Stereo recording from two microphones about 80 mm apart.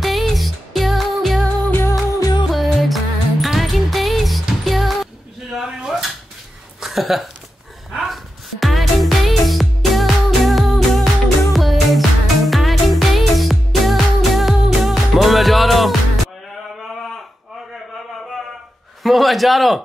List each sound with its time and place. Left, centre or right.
0.0 s music: centre
1.9 s music: left
2.5 s music: centre
5.6 s dishes: centre
6.8 s a sound: centre
7.9 s music: centre
19.0 s a man's voice: centre